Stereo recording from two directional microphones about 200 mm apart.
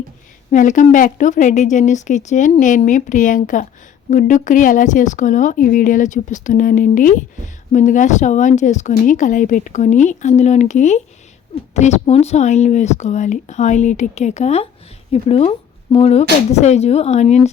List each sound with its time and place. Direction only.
0.5 s speech: 40° left (ahead or behind)